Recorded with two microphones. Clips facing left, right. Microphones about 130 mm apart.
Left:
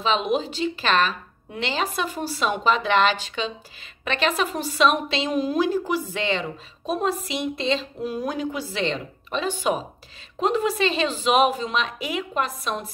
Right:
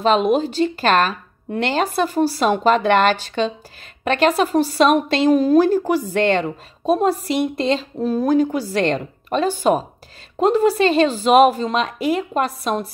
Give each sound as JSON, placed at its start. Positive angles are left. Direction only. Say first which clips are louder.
{"t": 0.0, "sound": "speech", "louder": "right 7 dB", "side_deg": -50}
{"t": 6.9, "sound": "a woman's voice", "louder": "right 7 dB", "side_deg": -40}